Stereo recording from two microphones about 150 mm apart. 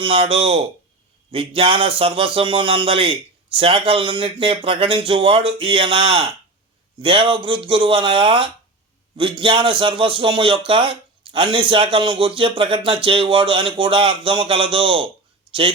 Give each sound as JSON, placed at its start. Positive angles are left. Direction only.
{"t": 0.0, "sound": "speech", "side_deg": -35}